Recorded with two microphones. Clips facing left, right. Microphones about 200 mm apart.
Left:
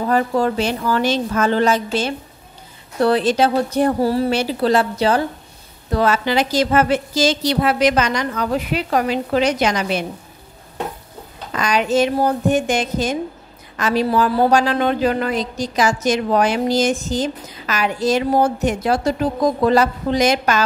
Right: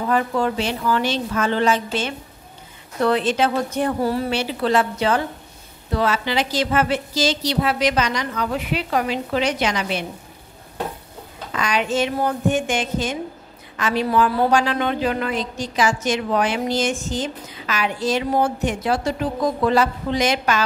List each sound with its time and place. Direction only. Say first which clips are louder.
0.0 s a woman's voice: left 3 dB; 40° left (ahead or behind)
11.5 s a woman's voice: left 4 dB; 40° left (ahead or behind)